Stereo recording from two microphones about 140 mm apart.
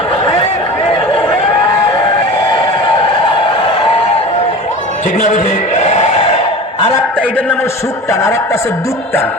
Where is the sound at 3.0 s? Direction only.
40° left (ahead or behind).